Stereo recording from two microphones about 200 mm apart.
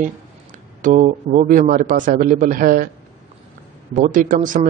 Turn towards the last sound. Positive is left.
turn(degrees=-40)  # may be behind; listen again after turning